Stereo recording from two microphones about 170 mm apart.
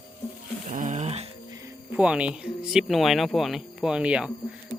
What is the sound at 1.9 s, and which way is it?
Speech, 5° right (ahead or behind).